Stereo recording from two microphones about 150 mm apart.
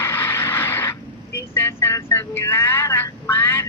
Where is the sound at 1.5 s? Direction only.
15° left (ahead or behind).